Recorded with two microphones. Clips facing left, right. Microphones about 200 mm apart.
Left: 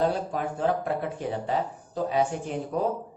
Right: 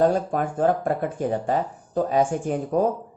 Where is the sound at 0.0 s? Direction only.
50° right (ahead or behind).